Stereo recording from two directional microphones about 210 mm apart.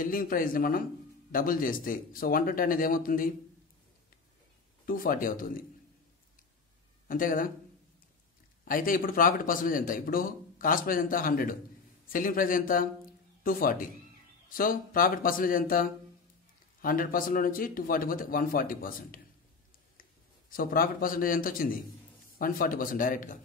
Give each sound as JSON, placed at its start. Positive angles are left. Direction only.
{"t": 0.0, "sound": "a man's voice", "side_deg": 40}
{"t": 4.8, "sound": "a man's voice", "side_deg": 40}
{"t": 7.1, "sound": "a man's voice", "side_deg": 40}
{"t": 8.6, "sound": "a man's voice", "side_deg": 40}